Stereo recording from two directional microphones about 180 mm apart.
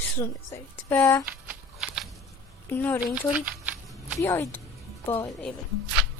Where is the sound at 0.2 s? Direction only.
15° left (ahead or behind).